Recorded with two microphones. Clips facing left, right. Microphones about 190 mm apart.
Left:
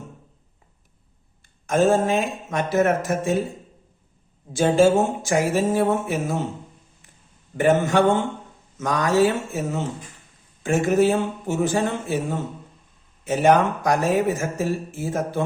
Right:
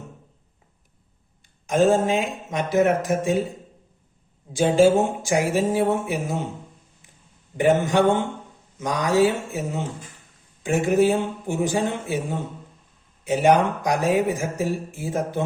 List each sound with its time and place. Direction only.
1.6 s speech: 15° right (ahead or behind)
4.5 s speech: 15° right (ahead or behind)
7.5 s speech: 15° right (ahead or behind)